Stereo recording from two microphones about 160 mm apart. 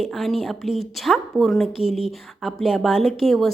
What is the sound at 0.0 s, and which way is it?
Speech, centre (ahead or behind).